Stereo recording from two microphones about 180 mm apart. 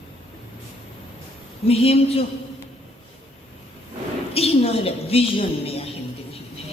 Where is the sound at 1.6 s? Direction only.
35° left (ahead or behind).